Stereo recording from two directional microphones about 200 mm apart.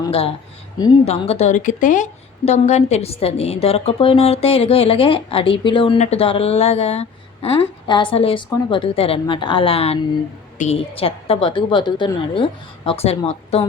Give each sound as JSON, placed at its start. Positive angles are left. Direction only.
{"t": 0.0, "sound": "a woman's voice", "side_deg": 30}